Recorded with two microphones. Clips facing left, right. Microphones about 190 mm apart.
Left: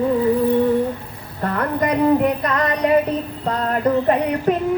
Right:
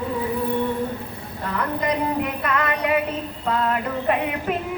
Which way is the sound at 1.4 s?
55° left (ahead or behind).